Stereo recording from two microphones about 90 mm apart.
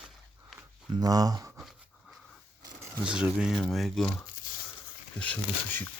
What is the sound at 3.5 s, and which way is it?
Speech, 5° left (ahead or behind).